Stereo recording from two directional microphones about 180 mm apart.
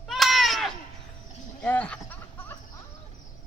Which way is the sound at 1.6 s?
10° left (ahead or behind).